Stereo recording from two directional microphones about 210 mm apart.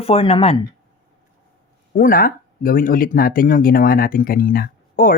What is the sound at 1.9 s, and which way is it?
Speech, 40° left (ahead or behind).